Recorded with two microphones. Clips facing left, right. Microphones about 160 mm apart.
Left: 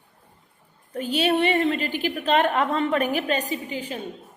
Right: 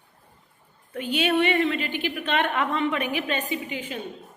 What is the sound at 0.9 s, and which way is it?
A woman's voice, 40° left (ahead or behind).